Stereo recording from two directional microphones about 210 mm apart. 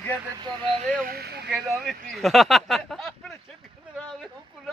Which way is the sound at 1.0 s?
45° right (ahead or behind).